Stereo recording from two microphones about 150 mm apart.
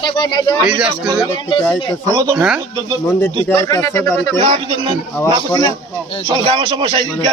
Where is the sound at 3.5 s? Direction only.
15° left (ahead or behind).